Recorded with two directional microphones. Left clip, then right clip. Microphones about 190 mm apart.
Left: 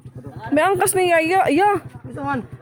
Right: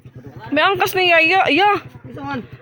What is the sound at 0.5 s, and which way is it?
Speech, 20° left (ahead or behind).